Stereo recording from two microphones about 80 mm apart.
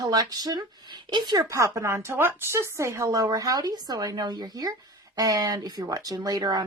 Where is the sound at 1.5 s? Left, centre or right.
Right.